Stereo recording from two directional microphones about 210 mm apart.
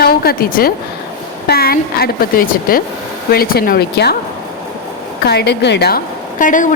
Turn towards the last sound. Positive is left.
turn(degrees=40)  # may be behind; listen again after turning